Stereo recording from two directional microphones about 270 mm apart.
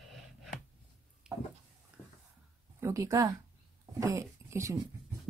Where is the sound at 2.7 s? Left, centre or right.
Centre.